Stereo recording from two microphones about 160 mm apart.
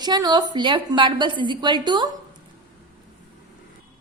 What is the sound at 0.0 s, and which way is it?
A woman's voice, 25° right (ahead or behind).